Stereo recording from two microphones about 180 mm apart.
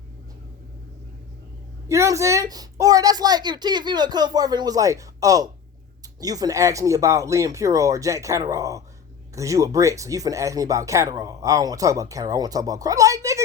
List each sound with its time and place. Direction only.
1.9 s speech: 15° right (ahead or behind)